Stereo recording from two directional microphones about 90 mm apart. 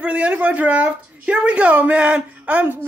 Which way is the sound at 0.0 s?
10° right (ahead or behind).